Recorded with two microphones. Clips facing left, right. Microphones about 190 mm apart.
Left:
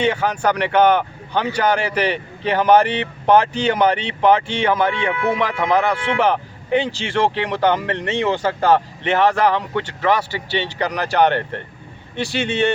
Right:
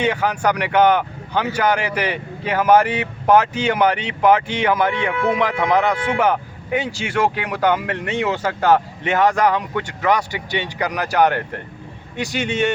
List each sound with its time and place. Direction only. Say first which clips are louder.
0.0 s a man's voice: left 1 dB; 10° right (ahead or behind)